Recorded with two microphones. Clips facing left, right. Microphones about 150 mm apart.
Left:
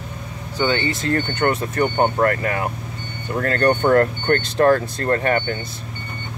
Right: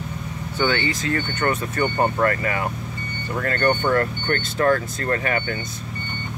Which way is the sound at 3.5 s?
40° left (ahead or behind).